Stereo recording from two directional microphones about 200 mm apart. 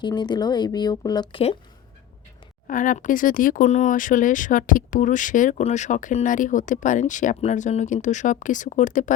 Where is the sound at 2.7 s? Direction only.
40° left (ahead or behind).